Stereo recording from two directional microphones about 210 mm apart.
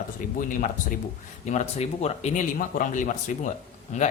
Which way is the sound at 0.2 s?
40° left (ahead or behind).